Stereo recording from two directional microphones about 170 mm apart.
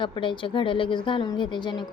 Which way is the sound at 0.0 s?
30° left (ahead or behind).